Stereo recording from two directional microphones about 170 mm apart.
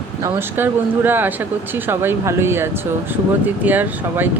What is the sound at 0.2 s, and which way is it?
Speech, 15° right (ahead or behind).